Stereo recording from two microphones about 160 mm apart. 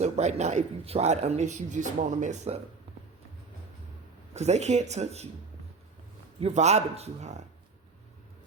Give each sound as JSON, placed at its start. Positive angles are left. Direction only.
{"t": 0.0, "sound": "speech", "side_deg": -45}
{"t": 4.4, "sound": "speech", "side_deg": -45}
{"t": 6.4, "sound": "speech", "side_deg": -45}